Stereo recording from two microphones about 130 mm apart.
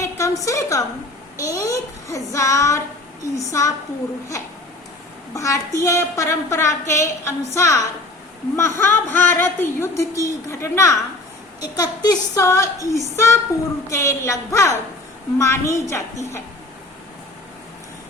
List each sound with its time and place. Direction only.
0.0 s a sound: 25° left (ahead or behind)
1.4 s a woman's voice: 25° left (ahead or behind)
5.3 s a woman's voice: 25° left (ahead or behind)